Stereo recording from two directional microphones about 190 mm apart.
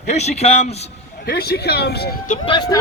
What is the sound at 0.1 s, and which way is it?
Speech, 35° left (ahead or behind).